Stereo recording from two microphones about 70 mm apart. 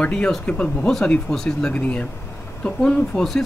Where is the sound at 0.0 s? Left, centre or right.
Centre.